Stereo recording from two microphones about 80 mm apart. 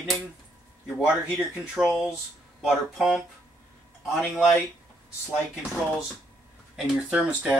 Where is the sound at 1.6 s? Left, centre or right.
Centre.